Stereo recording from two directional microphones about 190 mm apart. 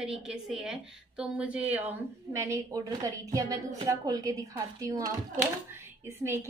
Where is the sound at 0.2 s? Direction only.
5° right (ahead or behind).